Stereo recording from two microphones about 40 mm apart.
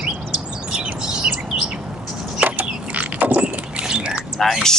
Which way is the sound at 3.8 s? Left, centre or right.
Right.